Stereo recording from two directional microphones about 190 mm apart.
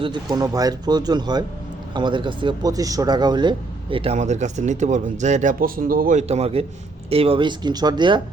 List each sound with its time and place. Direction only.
0.0 s speech: 25° right (ahead or behind)